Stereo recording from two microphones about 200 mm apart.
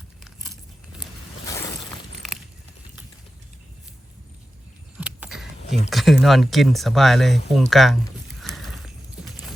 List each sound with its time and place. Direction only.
1.5 s boat: 15° left (ahead or behind)
4.9 s vehicle: 5° right (ahead or behind)
5.9 s speech: centre (ahead or behind)
8.4 s a sound: centre (ahead or behind)